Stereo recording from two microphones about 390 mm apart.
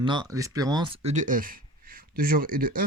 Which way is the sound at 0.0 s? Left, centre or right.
Centre.